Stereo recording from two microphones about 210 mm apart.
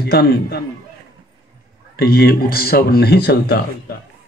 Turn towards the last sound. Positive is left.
turn(degrees=50)  # may be behind; listen again after turning